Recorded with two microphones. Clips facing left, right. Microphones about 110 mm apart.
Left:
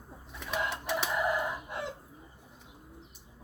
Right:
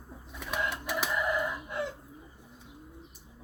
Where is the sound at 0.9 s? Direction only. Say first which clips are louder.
Left 1 dB; 25° left (ahead or behind).